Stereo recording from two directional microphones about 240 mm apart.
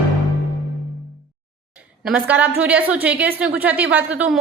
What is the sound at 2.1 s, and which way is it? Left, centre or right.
Speech, centre.